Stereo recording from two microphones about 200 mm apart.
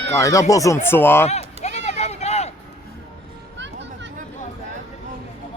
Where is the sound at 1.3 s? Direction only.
35° left (ahead or behind).